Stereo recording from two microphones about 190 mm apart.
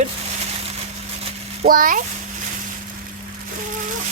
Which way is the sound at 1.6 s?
45° right (ahead or behind).